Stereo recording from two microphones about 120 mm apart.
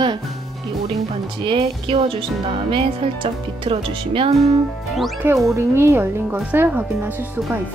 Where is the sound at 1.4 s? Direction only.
50° right (ahead or behind).